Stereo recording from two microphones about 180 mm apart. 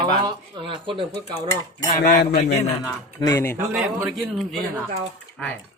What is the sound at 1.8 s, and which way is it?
Cutlery, 50° left (ahead or behind).